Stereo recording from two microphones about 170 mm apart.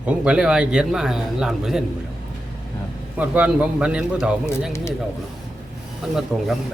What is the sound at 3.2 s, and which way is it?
Speech, 10° right (ahead or behind).